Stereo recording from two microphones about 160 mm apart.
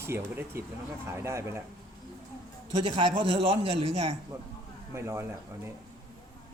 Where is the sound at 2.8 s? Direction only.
35° right (ahead or behind).